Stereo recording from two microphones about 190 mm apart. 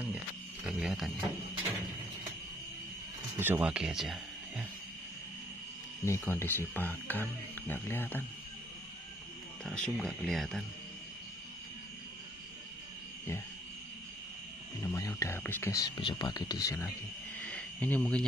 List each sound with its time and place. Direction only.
0.7 s speech: 5° right (ahead or behind)
3.3 s speech: 10° right (ahead or behind)
6.0 s speech: 15° left (ahead or behind)
9.8 s speech: centre (ahead or behind)
14.9 s speech: 15° left (ahead or behind)
17.5 s cricket: 5° left (ahead or behind)